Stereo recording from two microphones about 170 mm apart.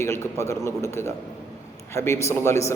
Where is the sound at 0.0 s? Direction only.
15° left (ahead or behind).